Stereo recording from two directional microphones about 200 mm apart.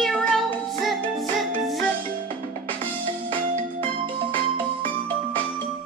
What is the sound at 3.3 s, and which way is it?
Music, 25° right (ahead or behind).